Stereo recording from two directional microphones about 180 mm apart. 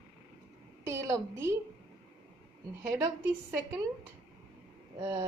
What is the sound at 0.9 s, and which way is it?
Speech, 15° right (ahead or behind).